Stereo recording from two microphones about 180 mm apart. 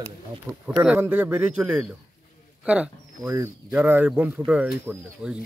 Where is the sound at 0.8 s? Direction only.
10° right (ahead or behind).